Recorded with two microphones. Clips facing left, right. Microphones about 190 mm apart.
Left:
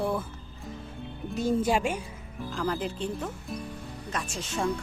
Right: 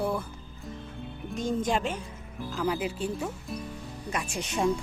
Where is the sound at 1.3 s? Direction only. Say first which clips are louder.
Left 3 dB; 10° left (ahead or behind).